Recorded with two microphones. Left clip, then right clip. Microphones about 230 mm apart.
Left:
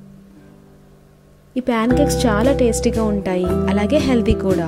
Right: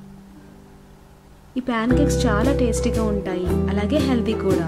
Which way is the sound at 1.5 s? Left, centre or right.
Left.